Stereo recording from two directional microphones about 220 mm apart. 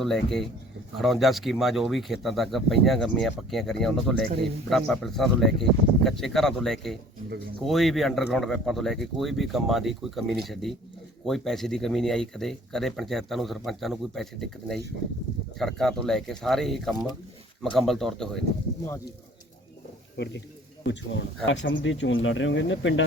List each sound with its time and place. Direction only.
0.0 s speech: centre (ahead or behind)
20.1 s a man's voice: 50° left (ahead or behind)